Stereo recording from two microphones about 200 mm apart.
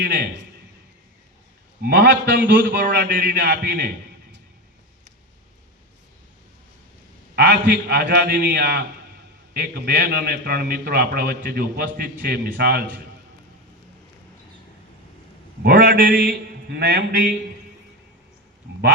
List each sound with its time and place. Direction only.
0.0 s a man's voice: 55° right (ahead or behind)
1.8 s a man's voice: 55° right (ahead or behind)
7.3 s a man's voice: 55° right (ahead or behind)
15.6 s a man's voice: 50° right (ahead or behind)